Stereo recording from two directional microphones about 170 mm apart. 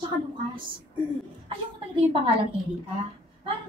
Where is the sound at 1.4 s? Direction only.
30° right (ahead or behind).